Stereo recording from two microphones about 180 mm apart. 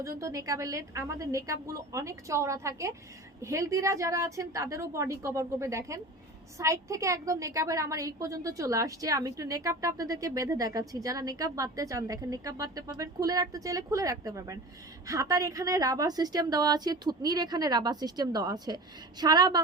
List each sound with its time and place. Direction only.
0.2 s a woman's voice: 15° right (ahead or behind)